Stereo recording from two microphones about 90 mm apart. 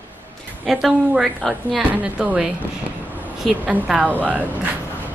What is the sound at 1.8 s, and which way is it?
Speech, 15° right (ahead or behind).